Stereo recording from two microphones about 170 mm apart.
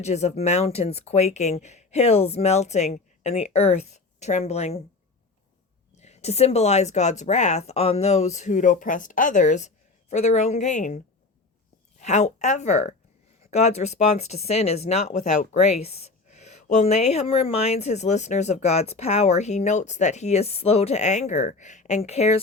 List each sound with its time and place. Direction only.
0.0 s speech: 40° left (ahead or behind)
6.0 s speech: 40° left (ahead or behind)